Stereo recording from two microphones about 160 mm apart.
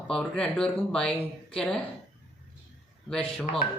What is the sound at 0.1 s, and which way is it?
A woman's voice, 5° left (ahead or behind).